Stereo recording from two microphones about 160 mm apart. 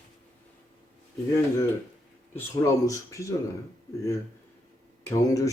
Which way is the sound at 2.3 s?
20° left (ahead or behind).